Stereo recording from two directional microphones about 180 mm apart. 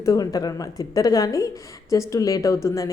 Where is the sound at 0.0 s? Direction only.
20° left (ahead or behind).